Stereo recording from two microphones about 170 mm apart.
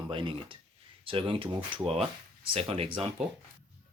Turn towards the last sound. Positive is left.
turn(degrees=-35)  # may be behind; listen again after turning